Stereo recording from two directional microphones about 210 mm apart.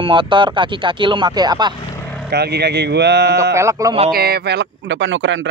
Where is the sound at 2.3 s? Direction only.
50° right (ahead or behind).